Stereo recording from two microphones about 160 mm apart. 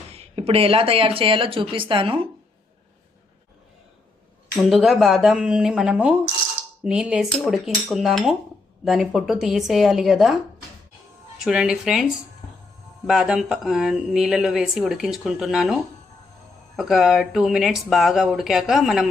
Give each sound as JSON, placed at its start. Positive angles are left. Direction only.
{"t": 0.1, "sound": "speech", "side_deg": -35}
{"t": 4.5, "sound": "speech", "side_deg": 0}
{"t": 11.4, "sound": "speech", "side_deg": -5}
{"t": 13.1, "sound": "speech", "side_deg": -5}